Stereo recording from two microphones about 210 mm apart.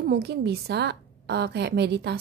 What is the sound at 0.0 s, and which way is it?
A woman's voice, 50° right (ahead or behind).